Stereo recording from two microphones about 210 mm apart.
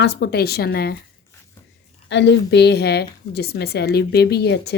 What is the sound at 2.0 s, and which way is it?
A woman's voice, 55° left (ahead or behind).